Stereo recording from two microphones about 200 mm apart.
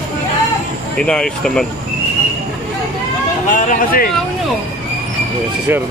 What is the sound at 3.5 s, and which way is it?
Speech, 45° left (ahead or behind).